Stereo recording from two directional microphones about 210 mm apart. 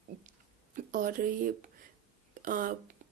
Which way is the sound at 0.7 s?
40° right (ahead or behind).